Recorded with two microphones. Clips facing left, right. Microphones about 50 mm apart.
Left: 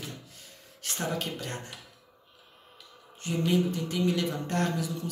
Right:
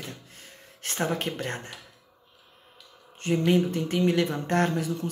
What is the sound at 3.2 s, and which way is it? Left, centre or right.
Speech, right.